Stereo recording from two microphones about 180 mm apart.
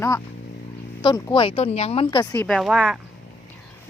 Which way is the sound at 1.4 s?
35° left (ahead or behind).